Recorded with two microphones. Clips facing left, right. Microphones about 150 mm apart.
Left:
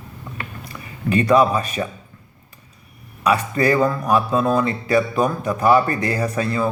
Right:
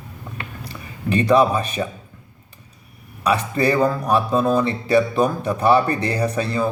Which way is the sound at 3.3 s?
30° right (ahead or behind).